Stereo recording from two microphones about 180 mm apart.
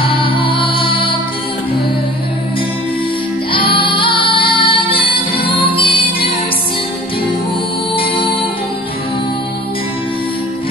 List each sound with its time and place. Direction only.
0.0 s music: 30° left (ahead or behind)
3.5 s music: 30° left (ahead or behind)
7.9 s music: 30° left (ahead or behind)